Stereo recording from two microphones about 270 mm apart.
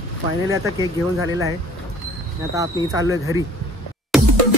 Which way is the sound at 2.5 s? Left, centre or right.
Centre.